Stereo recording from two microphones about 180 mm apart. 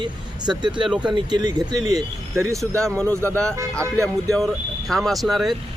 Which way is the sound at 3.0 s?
10° left (ahead or behind).